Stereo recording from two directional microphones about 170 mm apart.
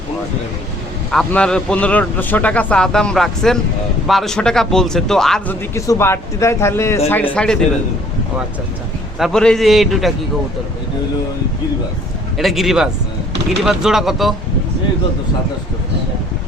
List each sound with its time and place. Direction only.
1.1 s speech: 5° left (ahead or behind)
5.7 s speech: 20° left (ahead or behind)
9.1 s speech: centre (ahead or behind)
12.4 s speech: centre (ahead or behind)